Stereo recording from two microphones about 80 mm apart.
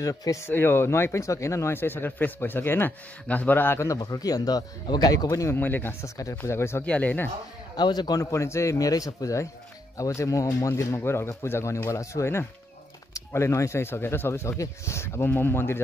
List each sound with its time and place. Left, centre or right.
0.0 s speech: left
0.5 s speech: left
3.8 s speech: left
5.5 s speech: left
6.0 s speech: left
6.4 s speech: left
6.9 s speech: centre
7.7 s a man's voice: left
8.3 s speech: left